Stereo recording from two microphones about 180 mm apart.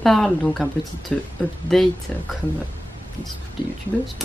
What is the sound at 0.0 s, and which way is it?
Speech, centre (ahead or behind).